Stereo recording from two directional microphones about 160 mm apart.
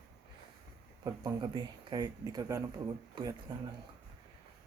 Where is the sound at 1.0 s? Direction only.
25° right (ahead or behind).